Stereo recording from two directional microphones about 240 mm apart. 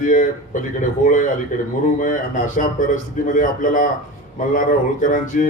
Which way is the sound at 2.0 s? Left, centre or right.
Left.